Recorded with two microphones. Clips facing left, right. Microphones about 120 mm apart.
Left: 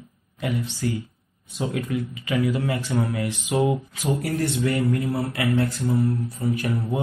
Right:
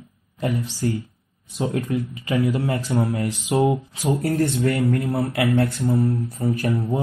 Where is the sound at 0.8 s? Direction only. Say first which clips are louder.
Right 2 dB; 30° right (ahead or behind).